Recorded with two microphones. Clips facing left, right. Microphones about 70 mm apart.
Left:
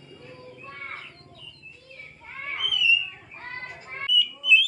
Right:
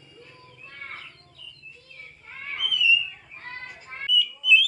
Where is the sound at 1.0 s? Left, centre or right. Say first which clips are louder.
Left 1 dB; left.